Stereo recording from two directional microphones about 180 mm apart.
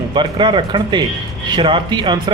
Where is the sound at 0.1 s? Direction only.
25° right (ahead or behind).